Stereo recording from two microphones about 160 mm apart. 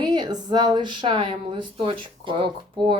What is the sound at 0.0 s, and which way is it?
Speech, 25° right (ahead or behind).